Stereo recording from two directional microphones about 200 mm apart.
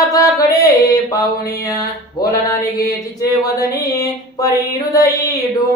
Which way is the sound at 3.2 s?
15° left (ahead or behind).